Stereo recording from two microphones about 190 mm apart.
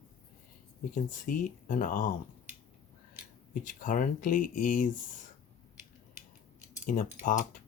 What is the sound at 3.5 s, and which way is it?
Speech, 45° left (ahead or behind).